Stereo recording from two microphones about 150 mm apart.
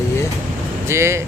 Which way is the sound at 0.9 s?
20° right (ahead or behind).